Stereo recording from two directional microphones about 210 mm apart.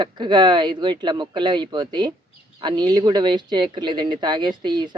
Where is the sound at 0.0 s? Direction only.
20° right (ahead or behind).